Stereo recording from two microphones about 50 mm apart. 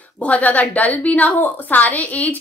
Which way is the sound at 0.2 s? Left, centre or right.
Left.